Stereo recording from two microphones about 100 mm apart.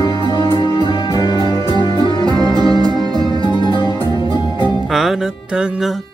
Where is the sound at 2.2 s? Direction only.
45° right (ahead or behind).